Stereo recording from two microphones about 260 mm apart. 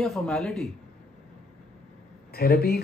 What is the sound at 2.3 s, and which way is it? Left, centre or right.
Speech, left.